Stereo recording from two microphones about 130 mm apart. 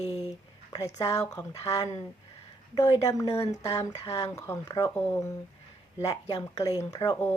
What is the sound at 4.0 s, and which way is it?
Speech, 50° left (ahead or behind).